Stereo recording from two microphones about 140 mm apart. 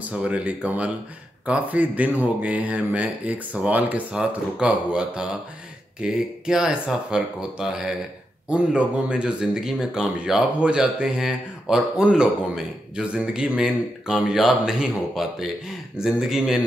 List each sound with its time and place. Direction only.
0.0 s speech: 10° right (ahead or behind)